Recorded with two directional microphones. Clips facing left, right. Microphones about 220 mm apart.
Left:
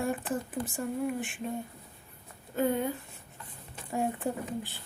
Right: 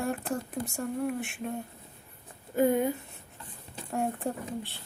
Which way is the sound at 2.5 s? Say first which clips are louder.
Right 4 dB; 10° right (ahead or behind).